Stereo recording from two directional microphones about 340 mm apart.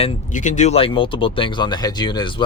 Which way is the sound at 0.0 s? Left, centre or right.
Left.